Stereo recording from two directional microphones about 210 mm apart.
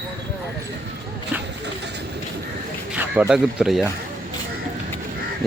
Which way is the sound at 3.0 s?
5° right (ahead or behind).